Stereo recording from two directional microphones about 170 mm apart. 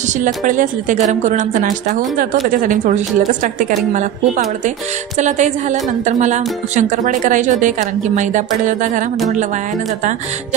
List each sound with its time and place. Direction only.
0.2 s speech: 50° right (ahead or behind)
4.6 s speech: 45° right (ahead or behind)